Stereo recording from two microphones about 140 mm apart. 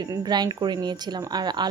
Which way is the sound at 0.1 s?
30° right (ahead or behind).